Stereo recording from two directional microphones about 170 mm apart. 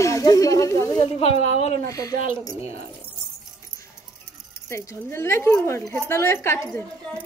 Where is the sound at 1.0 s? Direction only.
35° left (ahead or behind).